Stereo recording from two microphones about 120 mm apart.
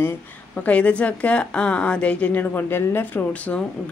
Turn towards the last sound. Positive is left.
turn(degrees=10)  # may be behind; listen again after turning